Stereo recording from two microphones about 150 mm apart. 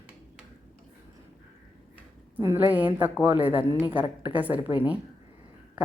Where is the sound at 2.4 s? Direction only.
15° right (ahead or behind).